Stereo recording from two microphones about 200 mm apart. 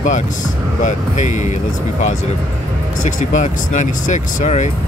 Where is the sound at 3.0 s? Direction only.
40° left (ahead or behind).